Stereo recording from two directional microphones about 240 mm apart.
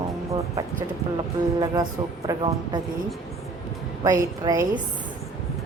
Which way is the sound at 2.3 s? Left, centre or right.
Centre.